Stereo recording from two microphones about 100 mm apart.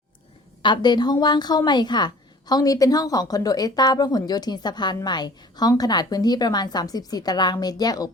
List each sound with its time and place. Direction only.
0.6 s a woman's voice: 50° left (ahead or behind)